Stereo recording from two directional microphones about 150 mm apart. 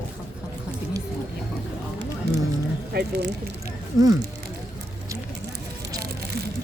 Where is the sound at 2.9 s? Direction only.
90° right.